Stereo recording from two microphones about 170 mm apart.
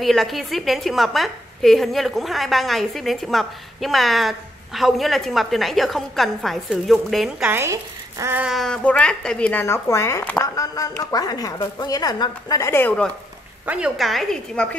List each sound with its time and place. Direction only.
0.0 s a woman's voice: centre (ahead or behind)
13.7 s a woman's voice: 5° right (ahead or behind)